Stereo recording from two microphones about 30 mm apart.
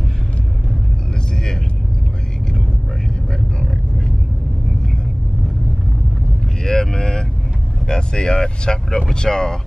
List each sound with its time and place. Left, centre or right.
6.6 s vehicle: centre
7.9 s speech: left